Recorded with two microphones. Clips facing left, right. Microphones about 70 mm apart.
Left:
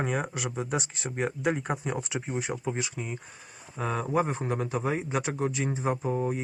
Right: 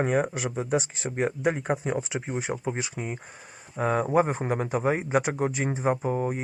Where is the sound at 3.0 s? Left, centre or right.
Centre.